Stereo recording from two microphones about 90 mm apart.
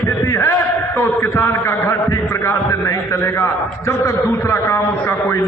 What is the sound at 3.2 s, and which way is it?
A man's voice, 30° left (ahead or behind).